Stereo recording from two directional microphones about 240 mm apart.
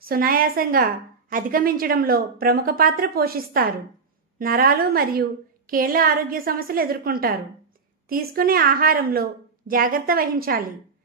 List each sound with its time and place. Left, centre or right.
0.0 s a woman's voice: right